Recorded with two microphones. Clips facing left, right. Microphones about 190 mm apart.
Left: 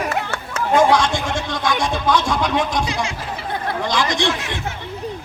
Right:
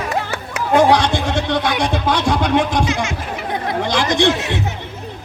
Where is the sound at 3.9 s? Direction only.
55° right (ahead or behind).